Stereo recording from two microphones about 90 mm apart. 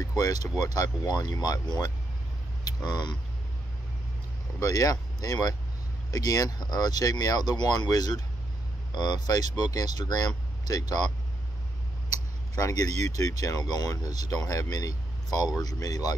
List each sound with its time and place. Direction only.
0.2 s speech: 45° left (ahead or behind)
4.6 s speech: 40° left (ahead or behind)
12.5 s speech: 45° left (ahead or behind)